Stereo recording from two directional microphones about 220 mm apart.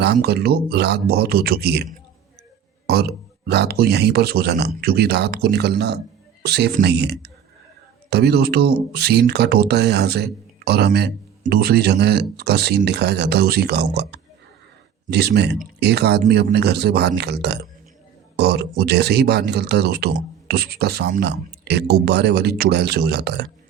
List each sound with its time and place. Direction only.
0.0 s speech: 45° right (ahead or behind)